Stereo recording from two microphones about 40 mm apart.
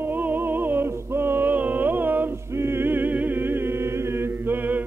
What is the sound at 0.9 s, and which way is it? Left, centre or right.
Music, right.